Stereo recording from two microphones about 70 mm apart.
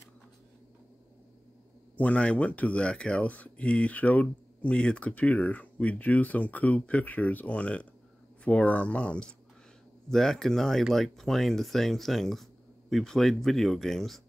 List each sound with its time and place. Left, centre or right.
2.0 s speech: centre
10.0 s speech: centre